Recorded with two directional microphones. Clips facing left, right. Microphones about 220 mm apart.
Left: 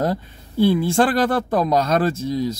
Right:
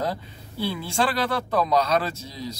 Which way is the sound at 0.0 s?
50° left (ahead or behind).